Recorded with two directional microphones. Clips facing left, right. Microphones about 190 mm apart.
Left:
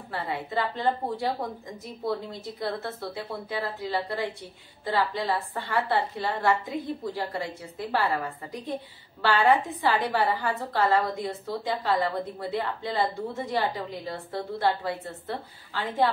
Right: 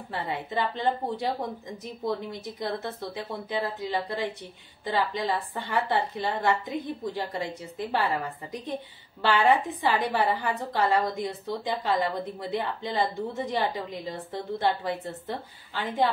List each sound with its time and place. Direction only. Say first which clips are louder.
0.1 s a woman's voice: left 1 dB; 20° right (ahead or behind)